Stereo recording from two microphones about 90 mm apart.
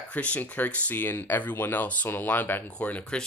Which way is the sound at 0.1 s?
15° left (ahead or behind).